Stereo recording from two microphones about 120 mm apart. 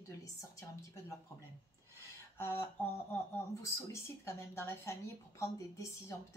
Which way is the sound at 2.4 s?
20° left (ahead or behind).